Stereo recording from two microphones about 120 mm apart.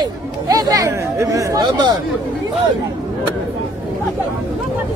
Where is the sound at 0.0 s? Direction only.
30° right (ahead or behind).